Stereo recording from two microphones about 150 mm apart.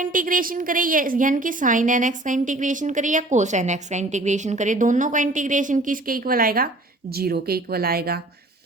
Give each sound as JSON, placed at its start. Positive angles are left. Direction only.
{"t": 0.0, "sound": "a woman's voice", "side_deg": -65}
{"t": 7.1, "sound": "a woman's voice", "side_deg": -90}